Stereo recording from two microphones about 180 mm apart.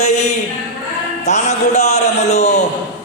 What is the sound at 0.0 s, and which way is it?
A man's voice, 40° left (ahead or behind).